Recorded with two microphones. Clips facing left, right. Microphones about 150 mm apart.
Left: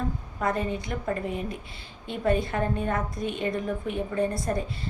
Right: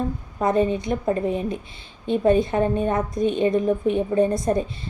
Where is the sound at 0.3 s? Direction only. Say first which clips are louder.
Right 8 dB; 20° right (ahead or behind).